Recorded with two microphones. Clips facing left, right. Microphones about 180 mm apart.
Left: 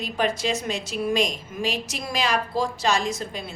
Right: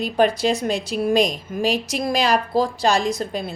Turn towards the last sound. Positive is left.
turn(degrees=-35)  # may be behind; listen again after turning